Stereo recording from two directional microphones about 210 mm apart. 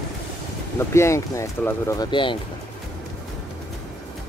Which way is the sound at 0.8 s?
10° left (ahead or behind).